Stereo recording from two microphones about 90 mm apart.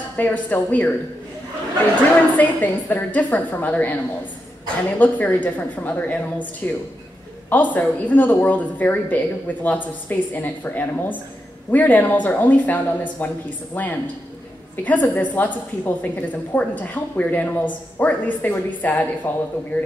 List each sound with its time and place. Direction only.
0.2 s a woman's voice: 20° left (ahead or behind)
2.3 s a woman's voice: 20° left (ahead or behind)